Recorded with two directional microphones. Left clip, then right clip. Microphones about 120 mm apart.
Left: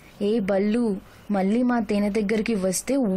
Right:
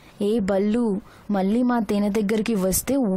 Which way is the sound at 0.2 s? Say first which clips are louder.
Right 1 dB; 45° right (ahead or behind).